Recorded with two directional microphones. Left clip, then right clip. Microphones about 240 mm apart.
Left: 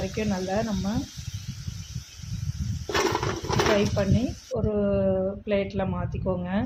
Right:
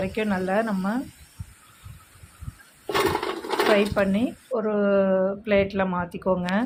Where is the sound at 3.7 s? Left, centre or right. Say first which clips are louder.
Right 3 dB; centre.